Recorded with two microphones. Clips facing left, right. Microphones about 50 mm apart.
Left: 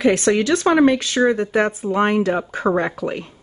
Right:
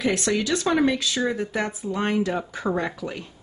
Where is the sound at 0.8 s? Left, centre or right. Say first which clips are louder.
Left 7 dB; left.